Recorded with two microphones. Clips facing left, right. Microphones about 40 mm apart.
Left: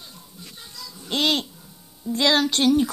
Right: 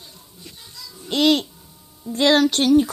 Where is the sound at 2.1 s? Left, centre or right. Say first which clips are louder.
Right 3 dB; right.